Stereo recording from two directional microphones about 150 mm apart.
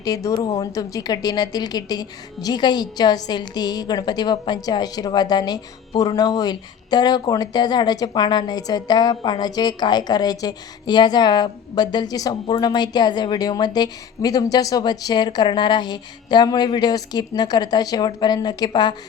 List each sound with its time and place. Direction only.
0.0 s speech: 20° left (ahead or behind)